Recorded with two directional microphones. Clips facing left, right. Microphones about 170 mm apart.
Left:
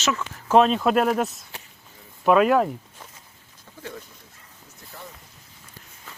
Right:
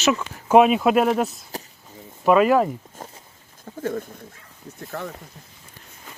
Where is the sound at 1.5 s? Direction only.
40° right (ahead or behind).